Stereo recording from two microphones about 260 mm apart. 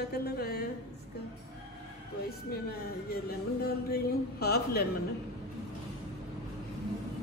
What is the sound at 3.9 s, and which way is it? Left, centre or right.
Speech, left.